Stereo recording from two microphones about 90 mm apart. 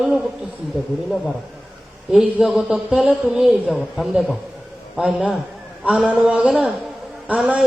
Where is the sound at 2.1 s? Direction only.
5° right (ahead or behind).